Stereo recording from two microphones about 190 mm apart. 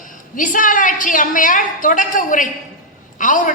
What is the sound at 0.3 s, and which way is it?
A man's voice, 45° left (ahead or behind).